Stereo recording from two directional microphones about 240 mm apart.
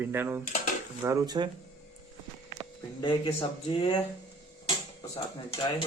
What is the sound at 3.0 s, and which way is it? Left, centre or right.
Speech, centre.